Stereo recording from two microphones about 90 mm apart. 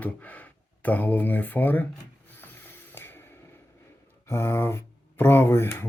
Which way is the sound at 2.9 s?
25° left (ahead or behind).